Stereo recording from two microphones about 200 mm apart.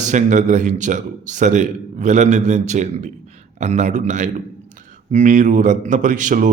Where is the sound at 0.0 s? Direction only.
35° right (ahead or behind).